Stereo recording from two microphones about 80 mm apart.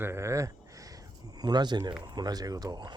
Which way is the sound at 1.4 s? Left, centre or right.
Right.